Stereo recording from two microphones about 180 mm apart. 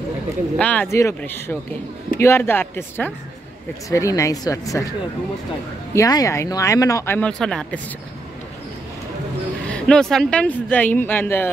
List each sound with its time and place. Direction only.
0.6 s speech: 10° left (ahead or behind)
5.9 s speech: 20° left (ahead or behind); by 7.8 s 5° left (ahead or behind)
9.7 s speech: 5° left (ahead or behind)